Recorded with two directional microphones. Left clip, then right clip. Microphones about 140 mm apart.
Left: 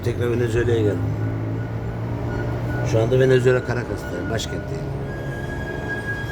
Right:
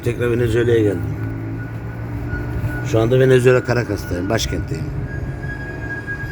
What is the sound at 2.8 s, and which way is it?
A man's voice, 25° right (ahead or behind).